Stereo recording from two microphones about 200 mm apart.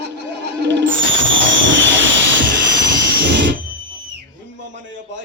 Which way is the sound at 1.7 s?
65° right (ahead or behind).